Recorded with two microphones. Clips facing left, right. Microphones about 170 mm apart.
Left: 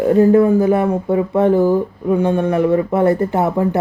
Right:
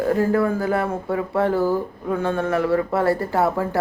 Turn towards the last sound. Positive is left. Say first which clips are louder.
# left 4 dB
turn(degrees=20)  # may be behind; listen again after turning